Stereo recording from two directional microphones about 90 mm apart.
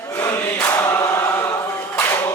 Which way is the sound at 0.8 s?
35° left (ahead or behind).